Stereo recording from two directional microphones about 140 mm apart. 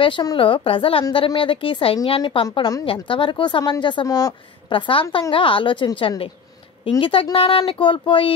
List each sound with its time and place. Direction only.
0.0 s a woman's voice: 30° left (ahead or behind)
4.7 s a woman's voice: 35° left (ahead or behind)